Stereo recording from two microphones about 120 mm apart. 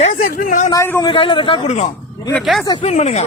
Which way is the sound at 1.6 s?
70° left (ahead or behind).